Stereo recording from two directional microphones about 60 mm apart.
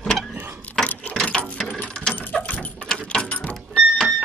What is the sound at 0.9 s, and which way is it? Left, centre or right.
Ratchet, left.